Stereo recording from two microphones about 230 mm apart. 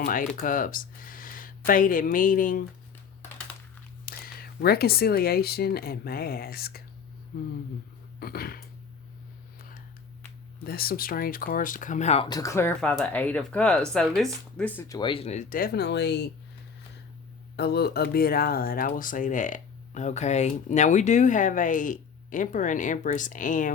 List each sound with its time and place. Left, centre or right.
0.0 s speech: left
4.0 s speech: left
8.2 s speech: left
9.6 s a sound: left
10.6 s speech: left
17.6 s speech: left